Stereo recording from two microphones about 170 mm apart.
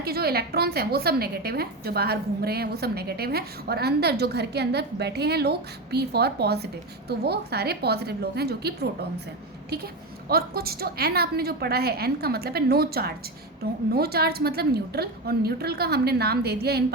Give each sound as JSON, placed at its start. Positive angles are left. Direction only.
{"t": 0.0, "sound": "a woman's voice", "side_deg": -65}